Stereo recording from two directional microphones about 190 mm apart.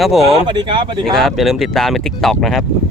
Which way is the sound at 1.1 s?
Centre (ahead or behind).